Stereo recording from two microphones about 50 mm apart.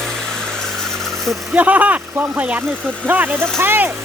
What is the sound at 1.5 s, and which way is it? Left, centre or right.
Speech, right.